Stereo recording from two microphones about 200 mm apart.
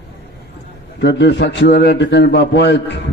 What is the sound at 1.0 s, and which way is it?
A man's voice, 60° left (ahead or behind).